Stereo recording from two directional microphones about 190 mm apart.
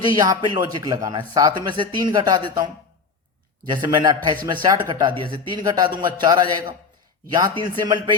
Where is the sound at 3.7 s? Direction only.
20° right (ahead or behind).